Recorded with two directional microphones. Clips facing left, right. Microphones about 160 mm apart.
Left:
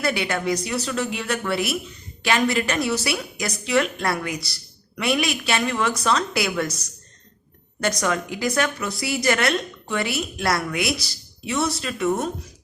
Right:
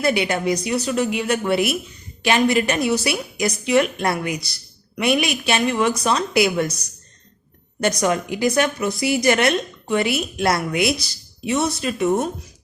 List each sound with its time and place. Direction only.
0.0 s a woman's voice: 20° right (ahead or behind)
7.8 s a woman's voice: 20° right (ahead or behind)